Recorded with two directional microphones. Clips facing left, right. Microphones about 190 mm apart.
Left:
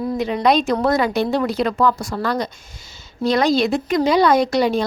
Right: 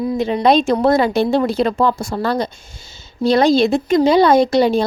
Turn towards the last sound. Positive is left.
turn(degrees=-30)  # may be behind; listen again after turning